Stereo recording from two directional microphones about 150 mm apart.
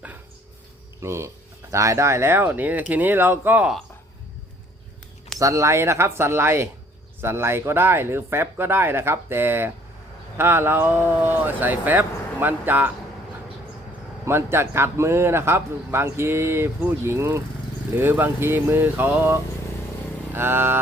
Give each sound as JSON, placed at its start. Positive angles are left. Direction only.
{"t": 1.0, "sound": "a man's voice", "side_deg": -15}
{"t": 5.4, "sound": "a man's voice", "side_deg": -20}
{"t": 14.3, "sound": "a man's voice", "side_deg": -15}